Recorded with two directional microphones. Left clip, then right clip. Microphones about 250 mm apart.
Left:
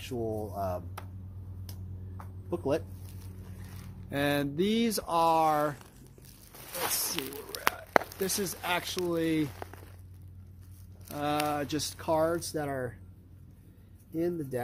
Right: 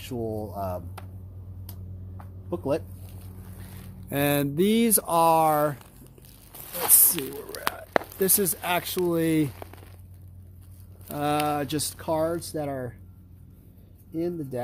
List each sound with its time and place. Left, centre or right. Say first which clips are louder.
0.0 s speech: right 3 dB; right
2.5 s speech: right 3 dB; right
4.1 s speech: right 5 dB; right
6.5 s speech: right 5 dB; centre
8.2 s speech: right 7 dB; right
11.1 s speech: right 5 dB; right; by 12.9 s centre
14.1 s speech: right 2 dB; centre